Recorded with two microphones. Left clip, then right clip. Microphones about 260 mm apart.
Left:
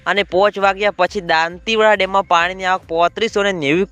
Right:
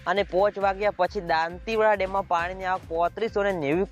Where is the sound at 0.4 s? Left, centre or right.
Left.